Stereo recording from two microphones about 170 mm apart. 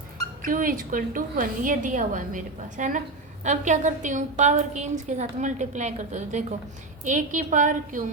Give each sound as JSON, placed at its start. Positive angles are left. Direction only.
{"t": 0.4, "sound": "a woman's voice", "side_deg": -55}